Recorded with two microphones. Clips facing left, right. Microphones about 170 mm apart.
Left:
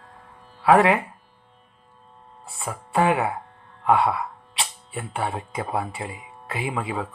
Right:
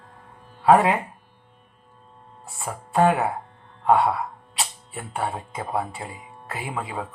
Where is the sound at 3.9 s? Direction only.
85° left.